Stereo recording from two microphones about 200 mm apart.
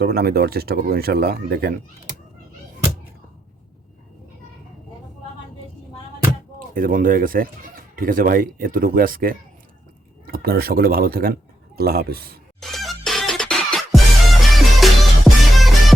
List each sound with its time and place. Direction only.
0.0 s speech: 50° right (ahead or behind)
6.7 s speech: 45° right (ahead or behind)
12.5 s music: centre (ahead or behind)